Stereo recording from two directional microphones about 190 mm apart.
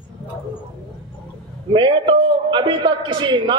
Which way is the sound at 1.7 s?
25° right (ahead or behind).